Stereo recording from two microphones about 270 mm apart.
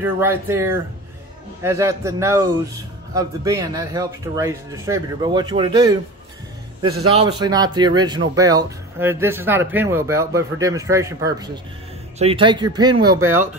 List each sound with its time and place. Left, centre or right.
0.0 s speech: centre
7.2 s speech: centre